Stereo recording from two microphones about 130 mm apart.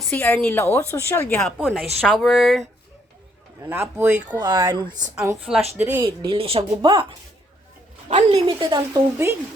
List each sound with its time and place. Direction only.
0.2 s speech: 20° left (ahead or behind)
1.4 s speech: 5° left (ahead or behind)
3.7 s speech: 15° right (ahead or behind)
4.3 s speech: 35° right (ahead or behind)
5.7 s speech: 15° right (ahead or behind)
6.2 s a woman's voice: 45° right (ahead or behind)
8.1 s a woman's voice: 50° right (ahead or behind)
8.9 s speech: 20° right (ahead or behind)